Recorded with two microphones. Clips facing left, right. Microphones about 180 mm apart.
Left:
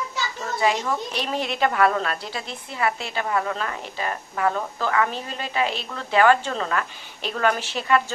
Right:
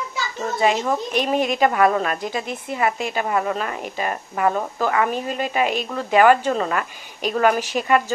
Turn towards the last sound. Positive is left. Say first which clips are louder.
# right 3 dB
turn(degrees=-10)  # may be behind; listen again after turning